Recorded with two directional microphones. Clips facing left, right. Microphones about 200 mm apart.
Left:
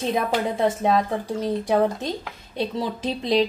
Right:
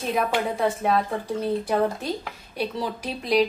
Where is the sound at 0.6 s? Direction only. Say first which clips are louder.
Left 3 dB; 20° left (ahead or behind).